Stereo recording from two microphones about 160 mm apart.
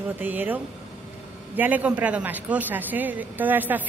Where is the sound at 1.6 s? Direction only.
10° right (ahead or behind).